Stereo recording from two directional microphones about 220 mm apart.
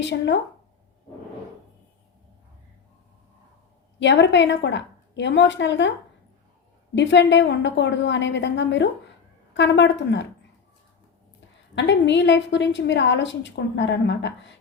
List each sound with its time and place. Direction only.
0.0 s speech: 55° left (ahead or behind)
4.0 s a woman's voice: 55° left (ahead or behind)
6.9 s a woman's voice: 55° left (ahead or behind)
11.7 s a woman's voice: 55° left (ahead or behind)